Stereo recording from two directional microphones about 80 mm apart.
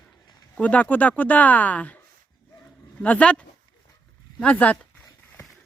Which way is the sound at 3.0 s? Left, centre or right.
Centre.